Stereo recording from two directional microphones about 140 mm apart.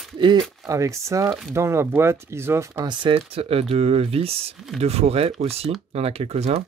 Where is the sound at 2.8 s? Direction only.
35° right (ahead or behind); by 6.6 s 50° right (ahead or behind).